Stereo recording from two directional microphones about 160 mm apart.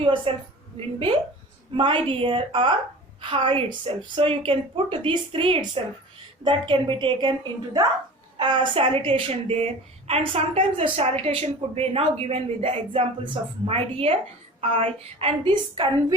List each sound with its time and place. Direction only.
0.0 s a woman's voice: 35° right (ahead or behind)